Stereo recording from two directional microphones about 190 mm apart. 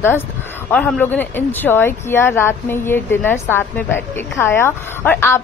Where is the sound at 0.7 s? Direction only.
10° left (ahead or behind).